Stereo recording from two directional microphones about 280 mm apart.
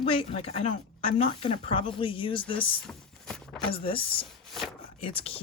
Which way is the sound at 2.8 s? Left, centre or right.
Centre.